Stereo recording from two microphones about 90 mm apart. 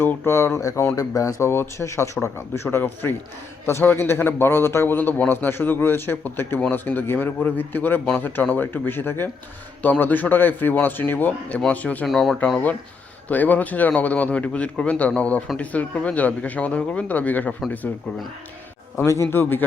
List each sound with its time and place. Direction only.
0.0 s a man's voice: 25° left (ahead or behind)
12.0 s speech: 5° left (ahead or behind)
13.2 s a man's voice: 20° left (ahead or behind)
18.9 s a man's voice: 30° left (ahead or behind)